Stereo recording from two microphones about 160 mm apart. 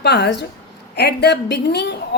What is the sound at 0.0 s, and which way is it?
A woman's voice, 90° left.